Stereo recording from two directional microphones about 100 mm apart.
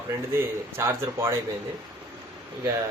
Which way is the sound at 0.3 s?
25° right (ahead or behind).